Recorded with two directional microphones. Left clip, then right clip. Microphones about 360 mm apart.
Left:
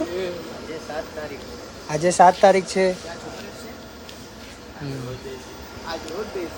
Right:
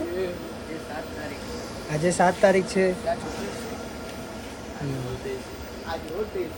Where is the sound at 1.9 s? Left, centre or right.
Centre.